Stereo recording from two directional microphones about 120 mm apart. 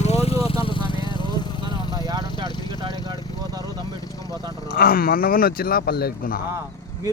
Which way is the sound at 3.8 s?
30° left (ahead or behind).